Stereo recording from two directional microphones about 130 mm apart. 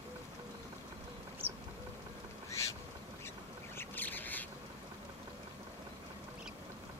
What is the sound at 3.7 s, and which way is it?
Duck, 15° left (ahead or behind).